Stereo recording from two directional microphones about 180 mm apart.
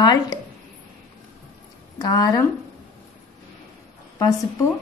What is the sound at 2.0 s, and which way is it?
Speech, 20° left (ahead or behind).